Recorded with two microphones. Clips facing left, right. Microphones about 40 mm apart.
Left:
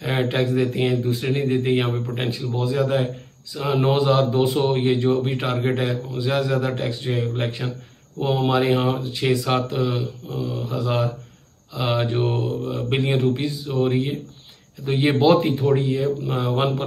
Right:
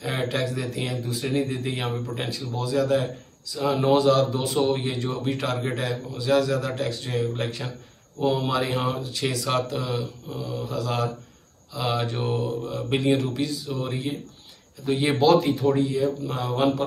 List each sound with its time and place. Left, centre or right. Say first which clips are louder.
0.0 s a man's voice: left 4 dB; centre